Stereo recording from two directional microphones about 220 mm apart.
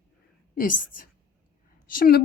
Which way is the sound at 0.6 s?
35° left (ahead or behind).